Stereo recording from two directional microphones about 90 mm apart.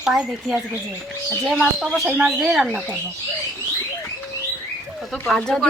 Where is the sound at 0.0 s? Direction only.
10° right (ahead or behind).